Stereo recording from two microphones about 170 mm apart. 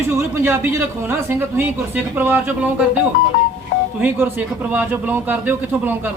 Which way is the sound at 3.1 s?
55° left (ahead or behind).